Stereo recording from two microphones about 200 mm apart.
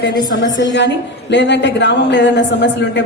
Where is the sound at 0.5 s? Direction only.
65° left (ahead or behind).